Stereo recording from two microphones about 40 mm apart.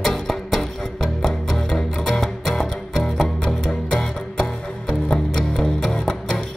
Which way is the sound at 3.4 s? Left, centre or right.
Left.